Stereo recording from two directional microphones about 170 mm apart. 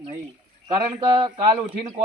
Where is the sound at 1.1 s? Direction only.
30° right (ahead or behind).